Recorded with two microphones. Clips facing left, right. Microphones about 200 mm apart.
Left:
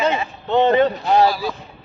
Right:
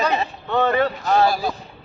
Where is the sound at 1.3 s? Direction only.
45° right (ahead or behind).